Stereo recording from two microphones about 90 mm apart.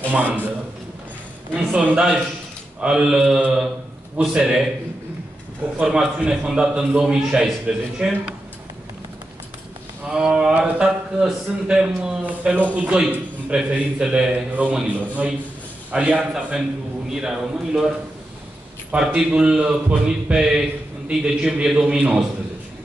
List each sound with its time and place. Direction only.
0.1 s a man's voice: 15° right (ahead or behind)
1.5 s a man's voice: 15° right (ahead or behind)
5.8 s a man's voice: 10° right (ahead or behind)
10.0 s a man's voice: 10° right (ahead or behind)